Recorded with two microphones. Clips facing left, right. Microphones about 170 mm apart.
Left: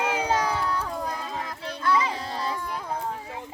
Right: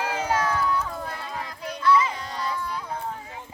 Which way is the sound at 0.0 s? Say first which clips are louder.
Left 1 dB; 20° left (ahead or behind).